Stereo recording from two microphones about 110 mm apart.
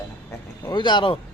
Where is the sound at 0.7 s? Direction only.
45° left (ahead or behind).